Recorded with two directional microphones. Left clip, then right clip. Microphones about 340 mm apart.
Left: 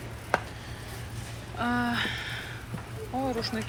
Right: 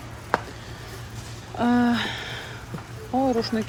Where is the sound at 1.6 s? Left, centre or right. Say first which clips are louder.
Right 5 dB; centre.